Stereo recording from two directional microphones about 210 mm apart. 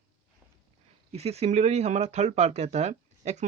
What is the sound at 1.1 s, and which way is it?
Speech, 30° right (ahead or behind).